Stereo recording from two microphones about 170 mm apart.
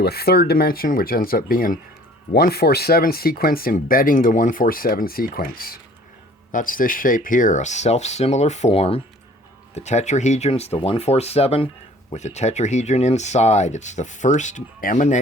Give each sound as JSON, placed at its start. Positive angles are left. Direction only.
{"t": 0.0, "sound": "speech", "side_deg": 65}